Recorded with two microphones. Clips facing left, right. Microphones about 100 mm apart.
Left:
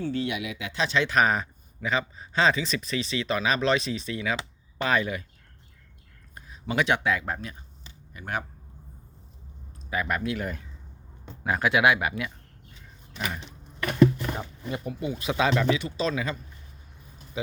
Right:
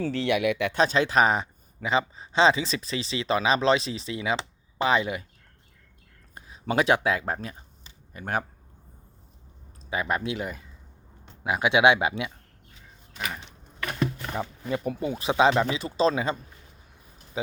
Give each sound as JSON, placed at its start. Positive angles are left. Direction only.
{"t": 0.0, "sound": "speech", "side_deg": -90}
{"t": 0.7, "sound": "speech", "side_deg": -45}
{"t": 6.3, "sound": "speech", "side_deg": -30}
{"t": 9.9, "sound": "speech", "side_deg": -25}
{"t": 10.4, "sound": "speech", "side_deg": -5}
{"t": 11.6, "sound": "speech", "side_deg": -25}
{"t": 14.7, "sound": "speech", "side_deg": -45}